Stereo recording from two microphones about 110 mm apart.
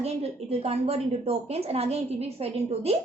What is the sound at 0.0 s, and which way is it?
A woman's voice, 65° right (ahead or behind).